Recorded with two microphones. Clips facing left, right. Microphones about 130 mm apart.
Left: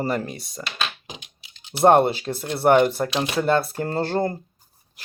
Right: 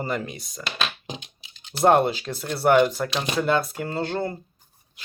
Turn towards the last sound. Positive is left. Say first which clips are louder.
# left 4 dB
turn(degrees=40)  # may be behind; listen again after turning